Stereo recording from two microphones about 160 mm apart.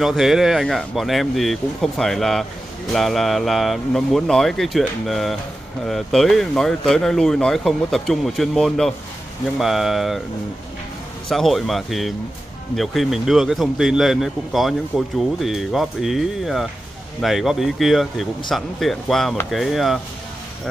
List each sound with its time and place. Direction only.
0.0 s a man's voice: centre (ahead or behind)
11.2 s a man's voice: centre (ahead or behind)